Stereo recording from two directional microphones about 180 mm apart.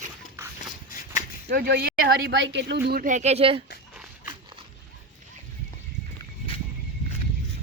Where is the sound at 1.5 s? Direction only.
60° right (ahead or behind); by 3.6 s 30° right (ahead or behind).